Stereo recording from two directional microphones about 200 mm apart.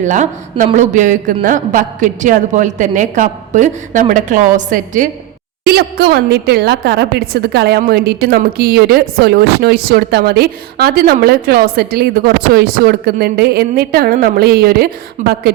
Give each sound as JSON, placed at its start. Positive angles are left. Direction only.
{"t": 0.0, "sound": "a man's voice", "side_deg": -40}
{"t": 5.6, "sound": "a woman's voice", "side_deg": -50}